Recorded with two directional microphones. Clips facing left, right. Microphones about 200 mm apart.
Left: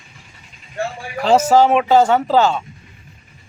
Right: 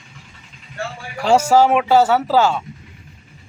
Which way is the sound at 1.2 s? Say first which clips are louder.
Left 1 dB; 10° right (ahead or behind).